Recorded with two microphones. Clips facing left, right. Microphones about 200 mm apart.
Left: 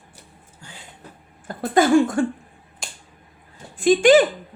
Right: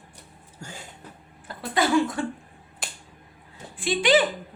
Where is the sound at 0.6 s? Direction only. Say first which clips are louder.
Right 5 dB; 45° right (ahead or behind).